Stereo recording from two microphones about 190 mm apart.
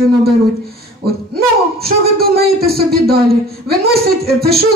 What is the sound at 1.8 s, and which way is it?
Speech, 55° right (ahead or behind).